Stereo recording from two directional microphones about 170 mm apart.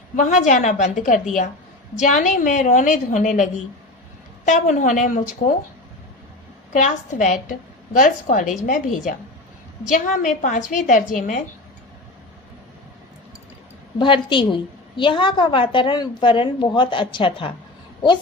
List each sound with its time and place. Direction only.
0.2 s a woman's voice: 45° left (ahead or behind)
6.7 s a woman's voice: 50° left (ahead or behind)
14.0 s a woman's voice: 30° left (ahead or behind)